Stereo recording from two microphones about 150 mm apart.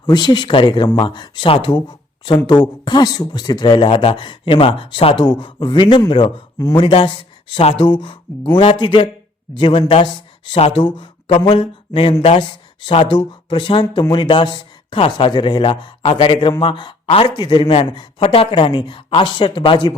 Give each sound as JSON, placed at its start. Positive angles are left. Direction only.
{"t": 0.0, "sound": "speech", "side_deg": 25}